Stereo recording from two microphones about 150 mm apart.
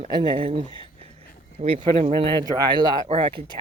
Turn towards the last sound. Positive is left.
turn(degrees=-35)  # may be behind; listen again after turning